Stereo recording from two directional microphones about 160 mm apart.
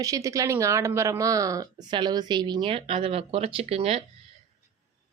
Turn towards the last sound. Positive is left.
turn(degrees=-35)  # may be behind; listen again after turning